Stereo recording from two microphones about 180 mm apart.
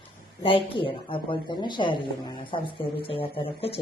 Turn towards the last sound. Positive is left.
turn(degrees=30)  # may be behind; listen again after turning